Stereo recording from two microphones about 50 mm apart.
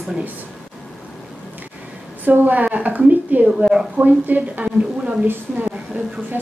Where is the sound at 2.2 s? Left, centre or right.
Right.